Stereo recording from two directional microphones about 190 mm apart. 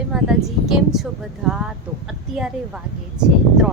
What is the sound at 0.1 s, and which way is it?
Speech, 5° right (ahead or behind).